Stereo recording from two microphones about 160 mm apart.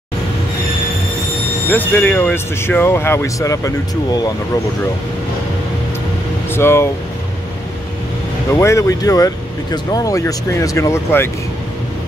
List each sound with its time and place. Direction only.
1.7 s speech: 10° left (ahead or behind)
6.5 s speech: 15° left (ahead or behind)
8.5 s speech: 20° left (ahead or behind)